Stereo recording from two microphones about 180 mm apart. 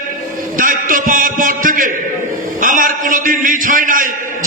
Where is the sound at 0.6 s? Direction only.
50° right (ahead or behind).